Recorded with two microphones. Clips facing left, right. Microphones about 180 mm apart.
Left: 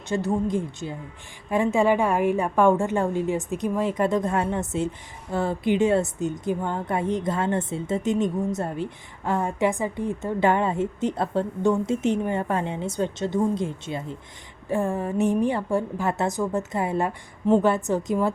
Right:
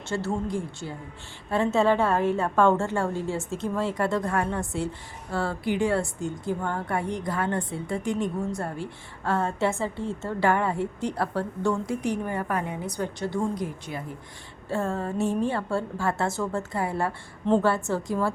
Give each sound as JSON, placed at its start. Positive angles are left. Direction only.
{"t": 0.1, "sound": "a woman's voice", "side_deg": 15}